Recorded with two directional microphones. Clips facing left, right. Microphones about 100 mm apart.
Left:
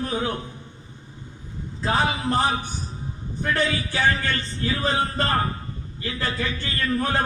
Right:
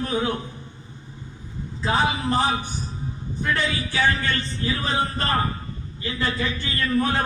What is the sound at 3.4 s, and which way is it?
A man's voice, 40° left (ahead or behind).